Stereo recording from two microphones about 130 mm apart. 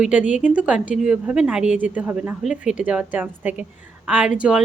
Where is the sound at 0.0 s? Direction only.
10° right (ahead or behind).